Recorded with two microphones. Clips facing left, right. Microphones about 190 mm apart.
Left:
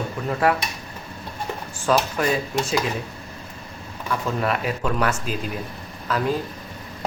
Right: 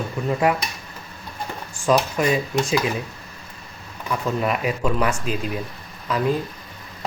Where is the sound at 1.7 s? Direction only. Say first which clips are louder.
Right 2 dB; 10° right (ahead or behind).